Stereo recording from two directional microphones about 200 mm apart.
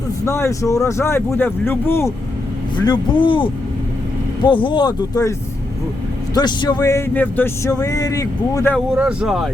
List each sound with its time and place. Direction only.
0.3 s speech: 15° left (ahead or behind)
6.3 s speech: 20° left (ahead or behind)
9.0 s speech: 5° right (ahead or behind)